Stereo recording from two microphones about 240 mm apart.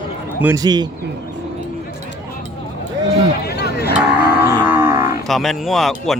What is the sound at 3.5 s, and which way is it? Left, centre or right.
Music, left.